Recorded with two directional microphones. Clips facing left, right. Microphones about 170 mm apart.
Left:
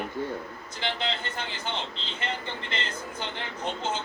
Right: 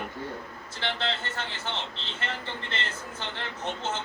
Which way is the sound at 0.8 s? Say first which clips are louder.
Even; 15° left (ahead or behind).